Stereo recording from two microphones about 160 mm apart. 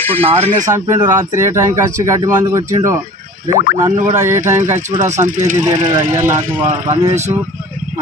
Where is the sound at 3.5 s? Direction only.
65° left (ahead or behind).